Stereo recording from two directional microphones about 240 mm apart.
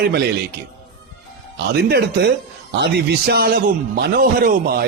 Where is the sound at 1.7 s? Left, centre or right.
Right.